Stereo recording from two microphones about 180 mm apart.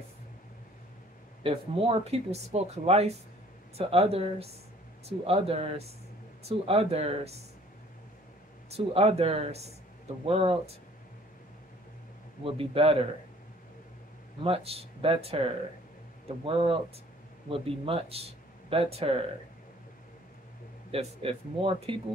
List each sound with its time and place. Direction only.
1.4 s speech: 30° right (ahead or behind)
8.7 s speech: 35° right (ahead or behind)
12.5 s speech: 30° right (ahead or behind)
14.4 s speech: 30° right (ahead or behind)
20.9 s speech: 30° right (ahead or behind)